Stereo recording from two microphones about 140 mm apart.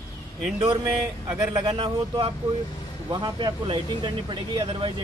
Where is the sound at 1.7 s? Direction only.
40° right (ahead or behind).